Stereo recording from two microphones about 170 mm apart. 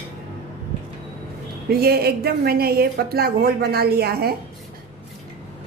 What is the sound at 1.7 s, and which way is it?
A woman's voice, 65° right (ahead or behind).